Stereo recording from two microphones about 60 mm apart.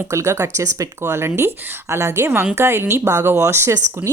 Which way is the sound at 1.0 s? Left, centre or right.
Right.